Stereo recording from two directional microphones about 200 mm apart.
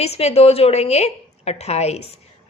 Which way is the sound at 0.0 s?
30° left (ahead or behind).